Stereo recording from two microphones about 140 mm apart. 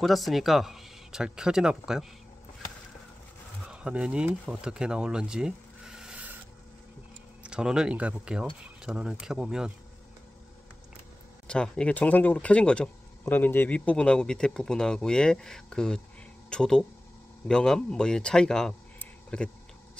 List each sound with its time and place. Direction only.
0.0 s speech: centre (ahead or behind)
3.6 s speech: 5° right (ahead or behind)
7.4 s speech: 5° right (ahead or behind)
11.4 s speech: 5° left (ahead or behind)